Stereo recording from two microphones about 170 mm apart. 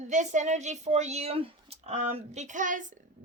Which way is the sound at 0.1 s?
45° right (ahead or behind).